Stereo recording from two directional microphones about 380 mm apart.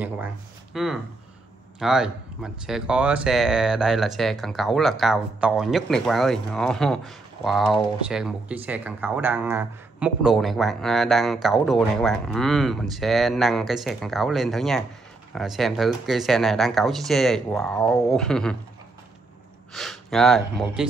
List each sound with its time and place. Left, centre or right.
0.7 s speech: centre
19.7 s speech: centre